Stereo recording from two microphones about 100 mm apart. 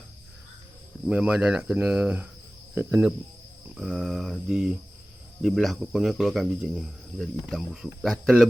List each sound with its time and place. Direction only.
1.0 s speech: 10° right (ahead or behind)
3.8 s speech: 5° left (ahead or behind)